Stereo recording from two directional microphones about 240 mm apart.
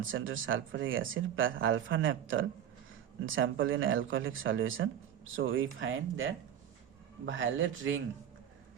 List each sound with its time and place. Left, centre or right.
0.0 s speech: right
7.3 s speech: right